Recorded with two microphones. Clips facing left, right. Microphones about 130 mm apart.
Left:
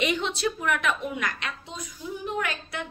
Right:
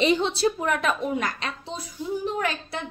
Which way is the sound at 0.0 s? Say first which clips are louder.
Right 5 dB; 30° right (ahead or behind).